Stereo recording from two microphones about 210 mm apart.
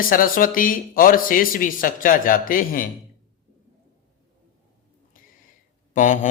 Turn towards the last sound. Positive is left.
turn(degrees=40)  # may be behind; listen again after turning